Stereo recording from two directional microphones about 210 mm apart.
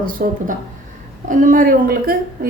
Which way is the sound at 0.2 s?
40° right (ahead or behind).